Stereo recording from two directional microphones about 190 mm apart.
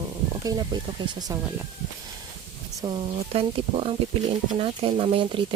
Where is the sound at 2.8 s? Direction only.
25° right (ahead or behind).